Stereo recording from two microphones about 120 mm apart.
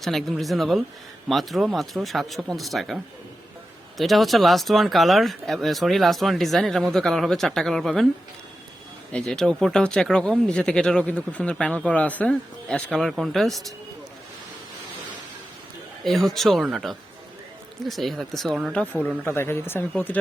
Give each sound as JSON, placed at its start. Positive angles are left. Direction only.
{"t": 0.0, "sound": "speech", "side_deg": 0}
{"t": 9.1, "sound": "speech", "side_deg": 5}
{"t": 16.0, "sound": "speech", "side_deg": 0}
{"t": 19.2, "sound": "speech", "side_deg": 20}